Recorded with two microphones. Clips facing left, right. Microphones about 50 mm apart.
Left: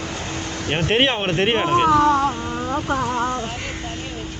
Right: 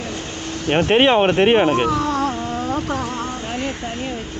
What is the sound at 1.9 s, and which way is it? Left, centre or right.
Speech, left.